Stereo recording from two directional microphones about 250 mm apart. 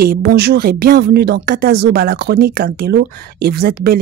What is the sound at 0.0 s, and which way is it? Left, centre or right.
Speech, right.